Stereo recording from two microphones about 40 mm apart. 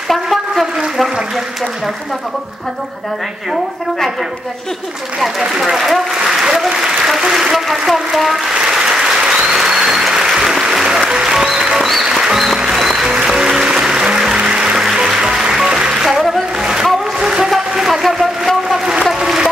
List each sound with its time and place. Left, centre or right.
0.1 s a sound: centre
5.4 s speech: centre
6.2 s applause: centre
7.5 s speech: centre
8.5 s applause: centre
11.9 s music: centre
13.1 s music: centre
16.1 s a sound: centre